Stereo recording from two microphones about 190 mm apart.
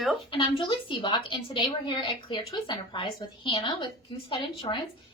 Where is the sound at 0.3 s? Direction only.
25° left (ahead or behind).